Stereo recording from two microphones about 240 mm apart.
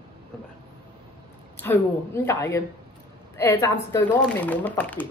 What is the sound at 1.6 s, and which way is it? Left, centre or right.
A woman's voice, centre.